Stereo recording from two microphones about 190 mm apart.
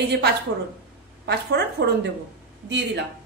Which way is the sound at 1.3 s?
60° right (ahead or behind).